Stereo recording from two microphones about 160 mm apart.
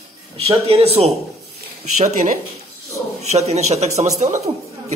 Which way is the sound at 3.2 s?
40° right (ahead or behind).